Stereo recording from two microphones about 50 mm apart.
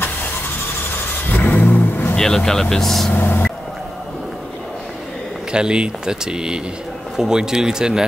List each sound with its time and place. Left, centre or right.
1.3 s vehicle: left
2.1 s speech: centre
3.2 s vehicle: left
5.5 s speech: centre